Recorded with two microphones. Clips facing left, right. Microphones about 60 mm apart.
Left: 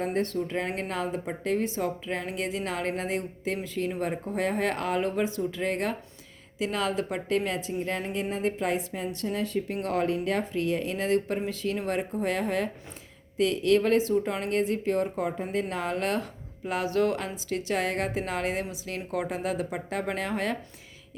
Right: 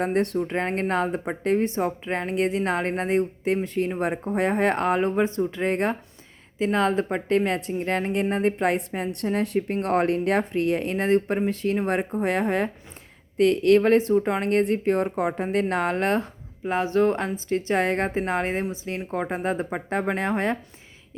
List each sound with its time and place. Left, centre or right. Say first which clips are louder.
0.0 s speech: right 5 dB; right
0.5 s a woman's voice: right 6 dB; right
13.3 s speech: right 5 dB; right
14.1 s a woman's voice: right 5 dB; right
14.5 s speech: right 4 dB; right
15.3 s speech: right 5 dB; right
15.7 s a woman's voice: right 6 dB; right